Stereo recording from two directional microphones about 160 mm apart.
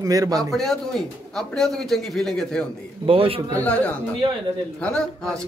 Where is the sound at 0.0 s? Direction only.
20° right (ahead or behind).